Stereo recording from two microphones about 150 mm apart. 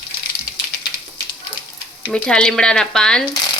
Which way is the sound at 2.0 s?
5° left (ahead or behind).